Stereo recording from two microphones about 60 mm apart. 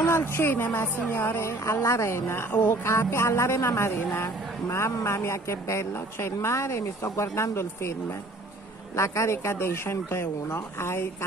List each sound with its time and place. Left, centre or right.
0.0 s a woman's voice: left
1.1 s speech: left
8.9 s speech: left